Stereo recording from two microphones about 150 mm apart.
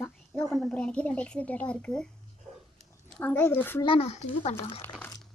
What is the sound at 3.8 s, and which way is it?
Speech, 40° left (ahead or behind).